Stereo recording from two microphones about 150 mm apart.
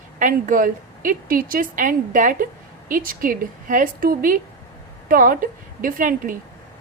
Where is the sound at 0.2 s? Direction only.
60° right (ahead or behind).